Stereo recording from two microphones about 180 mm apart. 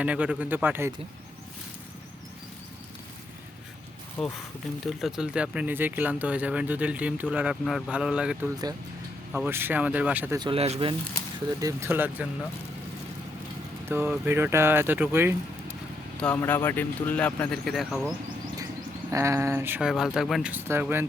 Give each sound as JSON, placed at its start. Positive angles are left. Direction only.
{"t": 0.0, "sound": "speech", "side_deg": -5}
{"t": 4.2, "sound": "speech", "side_deg": 10}
{"t": 10.3, "sound": "speech", "side_deg": -25}
{"t": 11.6, "sound": "speech", "side_deg": -15}
{"t": 13.8, "sound": "speech", "side_deg": -10}
{"t": 16.2, "sound": "speech", "side_deg": 10}
{"t": 19.1, "sound": "speech", "side_deg": -15}